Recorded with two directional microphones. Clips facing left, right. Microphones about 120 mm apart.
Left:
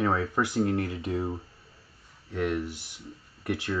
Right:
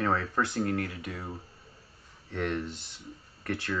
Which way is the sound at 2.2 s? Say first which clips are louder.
Left 3 dB; 5° left (ahead or behind).